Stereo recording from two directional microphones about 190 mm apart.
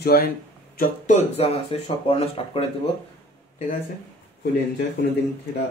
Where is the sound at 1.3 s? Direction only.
30° left (ahead or behind).